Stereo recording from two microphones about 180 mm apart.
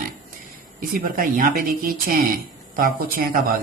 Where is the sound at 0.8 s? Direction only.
50° right (ahead or behind).